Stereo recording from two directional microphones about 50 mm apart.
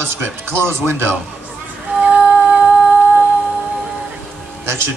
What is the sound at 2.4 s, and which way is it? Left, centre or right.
Humming, right.